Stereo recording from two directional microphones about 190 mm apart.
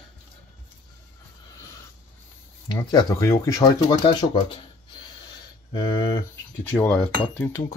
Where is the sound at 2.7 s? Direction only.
20° left (ahead or behind).